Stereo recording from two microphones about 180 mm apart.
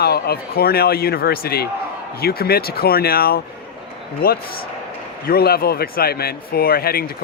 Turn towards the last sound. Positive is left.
turn(degrees=55)  # may be behind; listen again after turning